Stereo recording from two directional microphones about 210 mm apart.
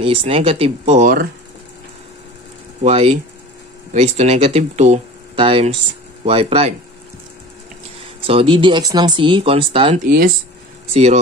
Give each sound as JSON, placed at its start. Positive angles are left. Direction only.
{"t": 0.0, "sound": "speech", "side_deg": -25}
{"t": 2.8, "sound": "speech", "side_deg": -30}
{"t": 8.0, "sound": "speech", "side_deg": -25}